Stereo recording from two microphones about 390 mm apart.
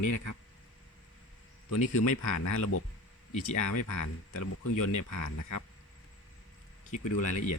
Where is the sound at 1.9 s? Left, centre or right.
Left.